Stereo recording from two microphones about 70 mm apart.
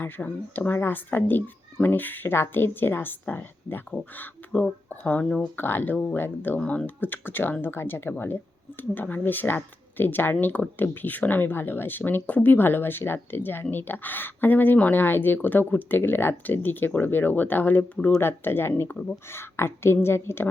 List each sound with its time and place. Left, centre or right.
0.0 s speech: left
5.2 s speech: centre
5.5 s a woman's voice: left
17.9 s speech: centre
18.2 s a woman's voice: left